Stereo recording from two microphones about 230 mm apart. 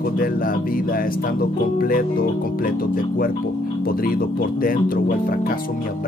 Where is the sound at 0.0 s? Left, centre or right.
Left.